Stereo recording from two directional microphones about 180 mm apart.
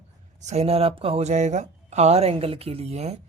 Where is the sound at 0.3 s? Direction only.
40° right (ahead or behind).